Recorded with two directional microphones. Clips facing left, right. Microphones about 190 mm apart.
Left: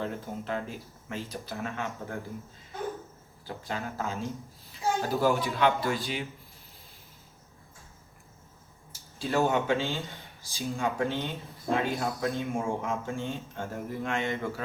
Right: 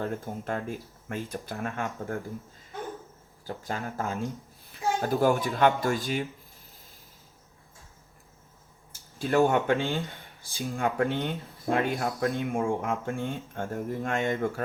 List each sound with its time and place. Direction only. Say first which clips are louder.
0.0 s speech: right 2 dB; 50° right (ahead or behind)
3.4 s speech: right 1 dB; 50° right (ahead or behind)
8.9 s speech: right 4 dB; 55° right (ahead or behind)